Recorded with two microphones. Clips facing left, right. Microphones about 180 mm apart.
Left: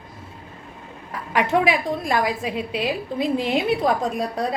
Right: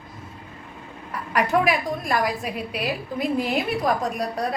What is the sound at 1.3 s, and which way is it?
A woman's voice, 25° left (ahead or behind).